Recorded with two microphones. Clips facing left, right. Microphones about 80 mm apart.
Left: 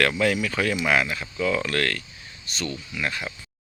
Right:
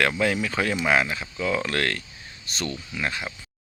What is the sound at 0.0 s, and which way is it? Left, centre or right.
Speech, right.